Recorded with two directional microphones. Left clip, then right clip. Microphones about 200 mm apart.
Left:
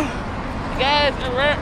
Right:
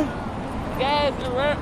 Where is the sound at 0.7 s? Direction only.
Centre (ahead or behind).